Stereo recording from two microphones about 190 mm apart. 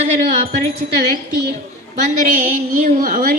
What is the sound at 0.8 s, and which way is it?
A woman's voice, 40° right (ahead or behind).